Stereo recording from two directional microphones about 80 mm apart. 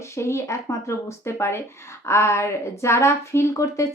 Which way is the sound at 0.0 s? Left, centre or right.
Left.